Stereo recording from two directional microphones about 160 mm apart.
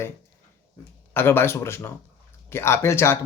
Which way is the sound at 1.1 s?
15° left (ahead or behind).